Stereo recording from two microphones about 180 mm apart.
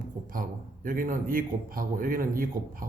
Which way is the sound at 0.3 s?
50° right (ahead or behind).